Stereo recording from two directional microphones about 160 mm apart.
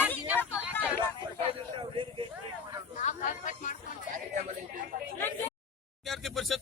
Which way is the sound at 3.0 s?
50° left (ahead or behind).